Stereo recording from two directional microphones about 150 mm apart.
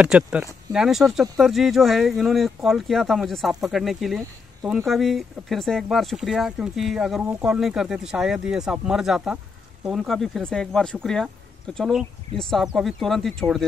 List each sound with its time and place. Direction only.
0.0 s speech: 5° right (ahead or behind)